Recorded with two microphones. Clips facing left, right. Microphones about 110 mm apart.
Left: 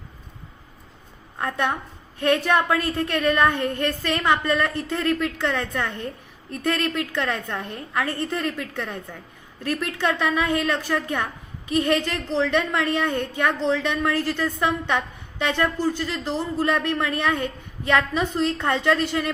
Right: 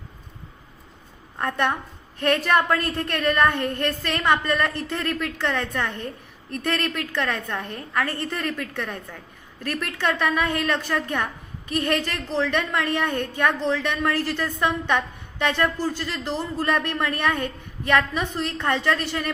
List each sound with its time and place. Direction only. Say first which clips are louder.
1.4 s a woman's voice: right 1 dB; 10° left (ahead or behind)